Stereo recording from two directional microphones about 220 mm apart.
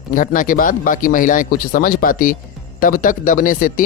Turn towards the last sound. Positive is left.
turn(degrees=40)  # may be behind; listen again after turning